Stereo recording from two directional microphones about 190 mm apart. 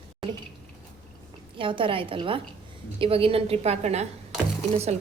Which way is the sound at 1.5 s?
25° right (ahead or behind).